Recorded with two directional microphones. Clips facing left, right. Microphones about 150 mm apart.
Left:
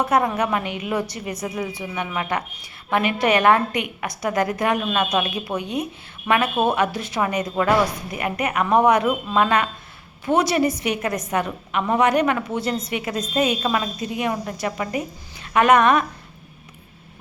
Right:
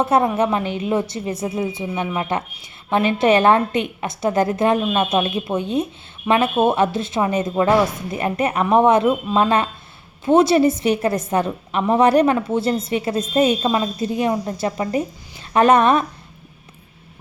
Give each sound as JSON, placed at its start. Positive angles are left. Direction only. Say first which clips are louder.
{"t": 0.0, "sound": "a woman's voice", "louder": "right 3 dB", "side_deg": -25}